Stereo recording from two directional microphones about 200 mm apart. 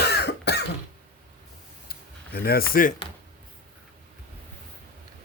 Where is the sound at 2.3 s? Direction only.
50° left (ahead or behind).